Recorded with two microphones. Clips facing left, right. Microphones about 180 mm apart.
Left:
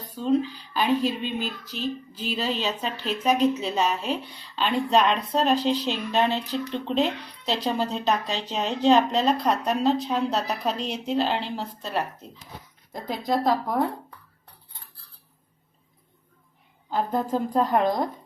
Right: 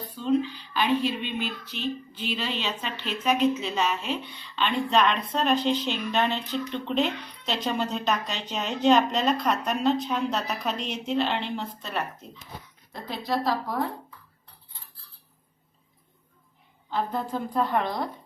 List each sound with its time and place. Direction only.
0.1 s speech: 40° left (ahead or behind)
12.9 s a woman's voice: 45° left (ahead or behind)
16.9 s a woman's voice: 45° left (ahead or behind)